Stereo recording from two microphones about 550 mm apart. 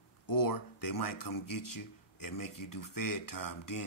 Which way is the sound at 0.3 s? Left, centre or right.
Left.